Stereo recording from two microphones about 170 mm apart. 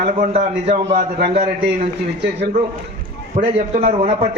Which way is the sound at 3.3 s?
55° right (ahead or behind).